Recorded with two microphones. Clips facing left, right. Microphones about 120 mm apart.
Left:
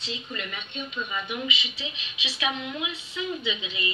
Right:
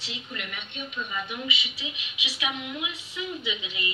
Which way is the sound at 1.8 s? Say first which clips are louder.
Left 1 dB; 10° right (ahead or behind).